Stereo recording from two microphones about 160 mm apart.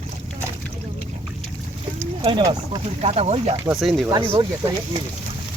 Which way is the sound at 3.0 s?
40° right (ahead or behind).